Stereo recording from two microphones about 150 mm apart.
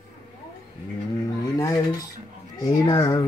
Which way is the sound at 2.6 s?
25° left (ahead or behind).